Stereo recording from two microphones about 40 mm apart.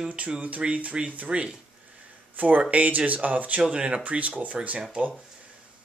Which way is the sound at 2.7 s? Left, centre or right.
Right.